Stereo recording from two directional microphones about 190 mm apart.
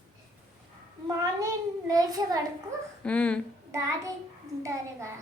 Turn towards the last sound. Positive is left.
turn(degrees=-15)  # may be behind; listen again after turning